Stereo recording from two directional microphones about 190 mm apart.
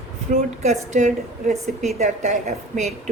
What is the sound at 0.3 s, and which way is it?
A woman's voice, 35° right (ahead or behind).